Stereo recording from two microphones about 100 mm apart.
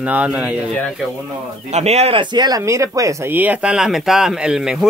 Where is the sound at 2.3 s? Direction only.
45° right (ahead or behind).